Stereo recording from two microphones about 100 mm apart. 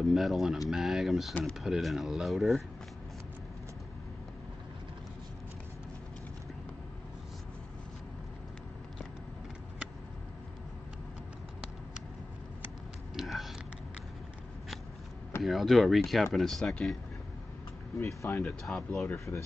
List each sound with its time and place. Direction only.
0.0 s speech: centre (ahead or behind)
13.1 s a sound: centre (ahead or behind)
15.4 s speech: centre (ahead or behind)
17.9 s speech: 25° left (ahead or behind)
18.4 s speech: 5° left (ahead or behind)
19.1 s speech: 30° left (ahead or behind)